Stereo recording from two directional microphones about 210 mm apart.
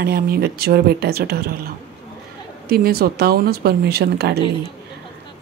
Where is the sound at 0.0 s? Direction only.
45° right (ahead or behind).